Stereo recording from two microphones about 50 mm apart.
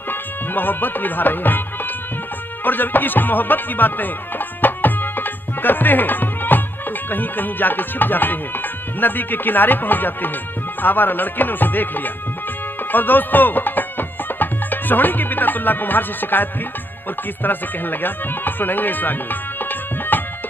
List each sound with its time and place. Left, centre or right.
0.1 s speech: left
2.6 s music: left
7.1 s speech: left
12.9 s music: left
17.4 s speech: left
19.6 s tabla: left